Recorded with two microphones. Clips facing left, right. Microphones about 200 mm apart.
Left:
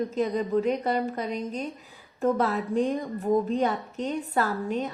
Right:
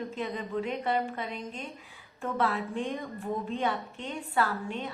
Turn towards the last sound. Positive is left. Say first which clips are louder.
# left 4 dB
turn(degrees=40)  # may be behind; listen again after turning